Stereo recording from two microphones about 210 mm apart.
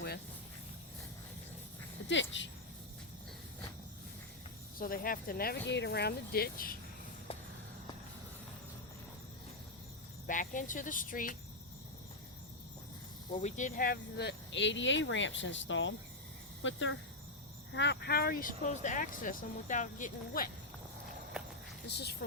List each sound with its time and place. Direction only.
2.3 s speech: 60° left (ahead or behind)
4.9 s speech: 40° left (ahead or behind)
10.2 s speech: 40° left (ahead or behind)
13.3 s speech: 35° left (ahead or behind); by 17.0 s 65° left (ahead or behind)
17.7 s speech: 55° left (ahead or behind)
21.4 s walk: 5° right (ahead or behind)
21.8 s speech: 50° left (ahead or behind)